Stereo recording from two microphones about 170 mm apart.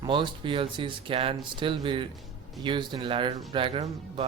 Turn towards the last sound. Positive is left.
turn(degrees=-35)  # may be behind; listen again after turning